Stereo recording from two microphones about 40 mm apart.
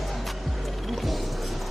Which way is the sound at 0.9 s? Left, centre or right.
Centre.